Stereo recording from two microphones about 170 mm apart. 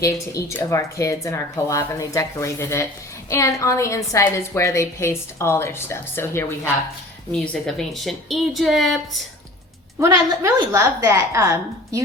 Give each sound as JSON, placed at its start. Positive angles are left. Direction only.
{"t": 0.0, "sound": "a woman's voice", "side_deg": 15}
{"t": 7.4, "sound": "a woman's voice", "side_deg": 5}
{"t": 10.0, "sound": "a woman's voice", "side_deg": -20}